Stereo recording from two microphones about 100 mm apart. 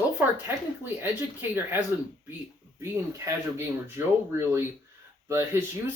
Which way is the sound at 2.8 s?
30° right (ahead or behind).